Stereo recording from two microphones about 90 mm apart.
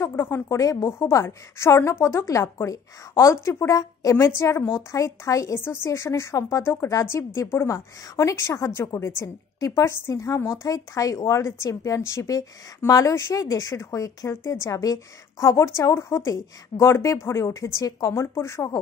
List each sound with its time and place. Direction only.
0.0 s a woman's voice: 30° left (ahead or behind)